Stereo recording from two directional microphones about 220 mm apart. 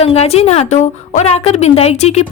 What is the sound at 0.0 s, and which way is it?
A woman's voice, 30° left (ahead or behind).